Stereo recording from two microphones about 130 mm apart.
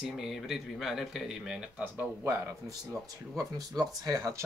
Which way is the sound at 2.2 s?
20° right (ahead or behind).